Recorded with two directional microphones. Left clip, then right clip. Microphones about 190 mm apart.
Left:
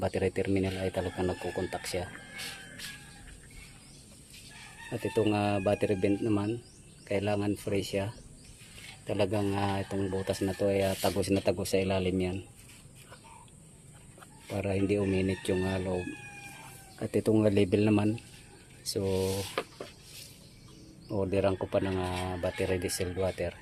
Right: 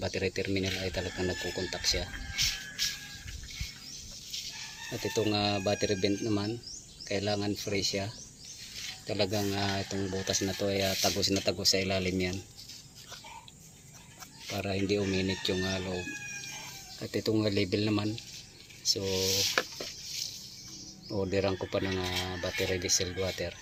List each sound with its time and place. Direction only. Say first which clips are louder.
0.0 s speech: left 2 dB; 15° left (ahead or behind)
4.9 s speech: left 2 dB; 10° left (ahead or behind)
11.2 s speech: even; 15° left (ahead or behind)
14.6 s speech: left 1 dB; 10° left (ahead or behind)
17.0 s speech: left 4 dB; 20° left (ahead or behind)
19.0 s speech: left 3 dB; 40° left (ahead or behind)
21.1 s speech: left 2 dB; 5° left (ahead or behind)